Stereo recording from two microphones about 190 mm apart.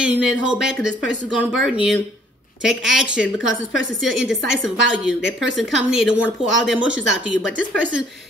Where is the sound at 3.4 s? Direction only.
80° right.